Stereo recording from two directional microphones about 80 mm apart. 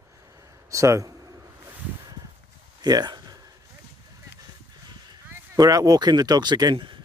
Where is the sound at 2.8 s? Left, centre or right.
Right.